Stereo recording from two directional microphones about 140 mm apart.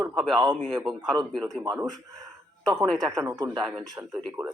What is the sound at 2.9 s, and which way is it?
Speech, 5° left (ahead or behind).